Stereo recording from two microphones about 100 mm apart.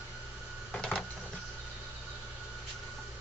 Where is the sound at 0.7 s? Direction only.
10° left (ahead or behind).